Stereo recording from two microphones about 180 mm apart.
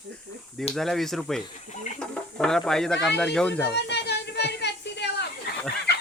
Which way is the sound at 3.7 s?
70° left (ahead or behind).